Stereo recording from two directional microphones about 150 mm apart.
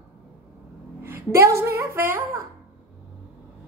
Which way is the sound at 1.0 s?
15° right (ahead or behind).